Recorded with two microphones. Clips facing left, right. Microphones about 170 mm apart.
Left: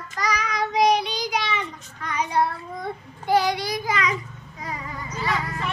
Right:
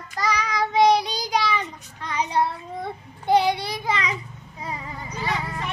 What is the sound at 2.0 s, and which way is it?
Child singing, 30° right (ahead or behind).